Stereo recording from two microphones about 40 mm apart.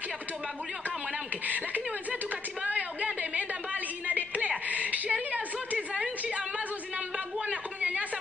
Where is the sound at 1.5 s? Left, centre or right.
Right.